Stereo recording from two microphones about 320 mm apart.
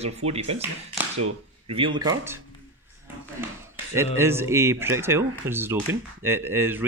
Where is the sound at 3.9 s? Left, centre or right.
Centre.